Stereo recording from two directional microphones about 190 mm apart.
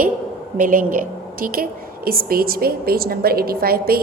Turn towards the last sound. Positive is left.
turn(degrees=-50)  # may be behind; listen again after turning